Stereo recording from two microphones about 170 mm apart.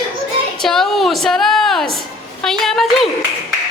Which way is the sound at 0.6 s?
Centre (ahead or behind).